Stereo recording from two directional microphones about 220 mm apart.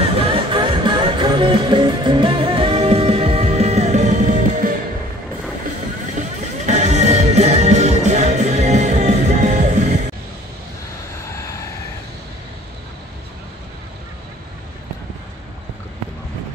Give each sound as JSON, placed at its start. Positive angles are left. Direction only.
{"t": 0.1, "sound": "music", "side_deg": -25}
{"t": 6.1, "sound": "music", "side_deg": -35}